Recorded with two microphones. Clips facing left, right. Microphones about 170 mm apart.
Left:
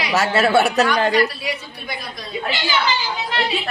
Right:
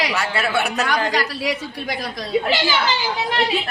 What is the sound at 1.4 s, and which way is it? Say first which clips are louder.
Speech: right 4 dB; 90° right.